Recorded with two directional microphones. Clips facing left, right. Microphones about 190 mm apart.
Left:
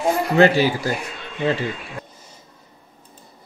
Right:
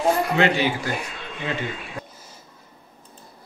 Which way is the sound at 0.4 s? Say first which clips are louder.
Left 5 dB; 35° left (ahead or behind).